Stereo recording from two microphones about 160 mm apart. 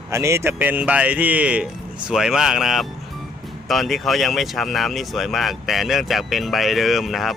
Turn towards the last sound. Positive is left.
turn(degrees=0)  # may be behind; listen again after turning